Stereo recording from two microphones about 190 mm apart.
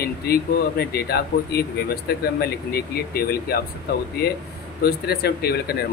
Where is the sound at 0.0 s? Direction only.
55° left (ahead or behind).